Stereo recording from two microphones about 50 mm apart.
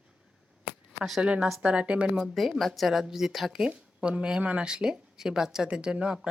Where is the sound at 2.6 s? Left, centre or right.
Centre.